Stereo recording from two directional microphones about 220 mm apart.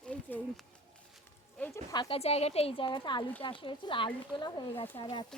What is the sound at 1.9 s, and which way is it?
Speech, 20° left (ahead or behind).